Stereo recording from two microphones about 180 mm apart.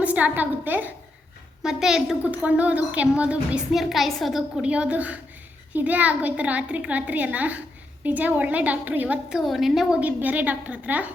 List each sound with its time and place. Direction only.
0.0 s a woman's voice: 10° right (ahead or behind)